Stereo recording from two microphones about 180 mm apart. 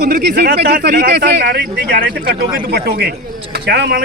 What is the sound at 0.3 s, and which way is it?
Speech, 60° right (ahead or behind).